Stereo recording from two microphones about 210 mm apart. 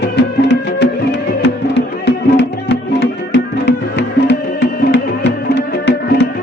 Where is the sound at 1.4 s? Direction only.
55° left (ahead or behind).